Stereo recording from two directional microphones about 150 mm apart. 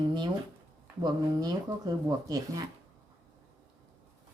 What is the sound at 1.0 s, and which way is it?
Speech, 25° right (ahead or behind).